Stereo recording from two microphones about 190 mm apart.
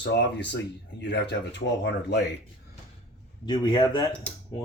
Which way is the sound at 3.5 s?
25° left (ahead or behind).